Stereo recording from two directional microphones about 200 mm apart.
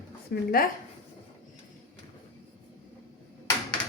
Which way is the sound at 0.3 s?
45° left (ahead or behind).